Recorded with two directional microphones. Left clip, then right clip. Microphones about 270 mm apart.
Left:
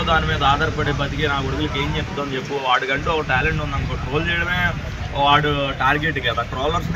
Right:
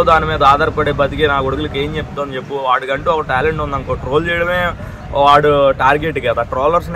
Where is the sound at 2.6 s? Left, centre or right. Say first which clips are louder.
Right 5 dB; right.